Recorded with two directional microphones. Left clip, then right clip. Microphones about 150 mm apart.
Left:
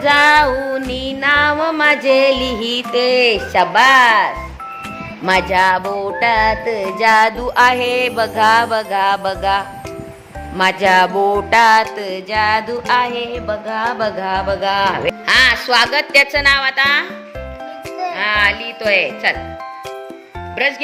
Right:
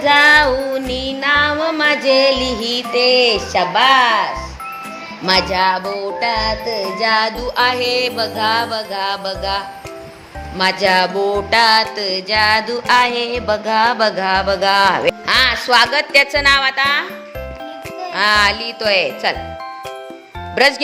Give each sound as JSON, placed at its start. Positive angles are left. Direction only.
{"t": 0.0, "sound": "music", "side_deg": 15}
{"t": 13.2, "sound": "speech", "side_deg": -15}
{"t": 18.2, "sound": "speech", "side_deg": -30}
{"t": 20.6, "sound": "speech", "side_deg": -40}